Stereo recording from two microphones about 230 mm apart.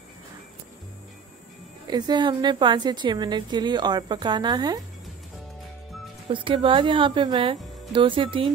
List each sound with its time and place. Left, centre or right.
1.9 s a woman's voice: centre
6.3 s a woman's voice: right